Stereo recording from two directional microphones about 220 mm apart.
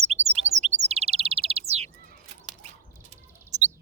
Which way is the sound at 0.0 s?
30° right (ahead or behind).